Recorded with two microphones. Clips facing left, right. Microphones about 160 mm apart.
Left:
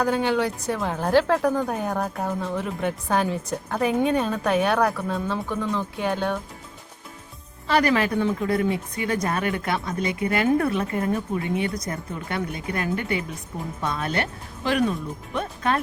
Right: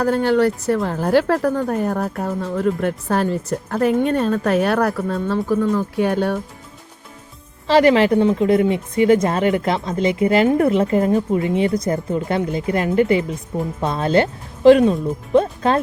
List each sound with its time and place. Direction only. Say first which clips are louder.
0.0 s speech: right 6 dB; centre (ahead or behind)
7.7 s speech: right 8 dB; 25° right (ahead or behind)